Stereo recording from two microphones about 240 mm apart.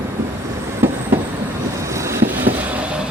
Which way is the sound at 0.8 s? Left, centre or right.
Centre.